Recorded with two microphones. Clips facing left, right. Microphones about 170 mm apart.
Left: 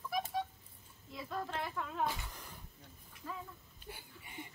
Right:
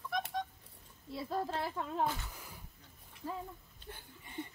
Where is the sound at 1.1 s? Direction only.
30° right (ahead or behind).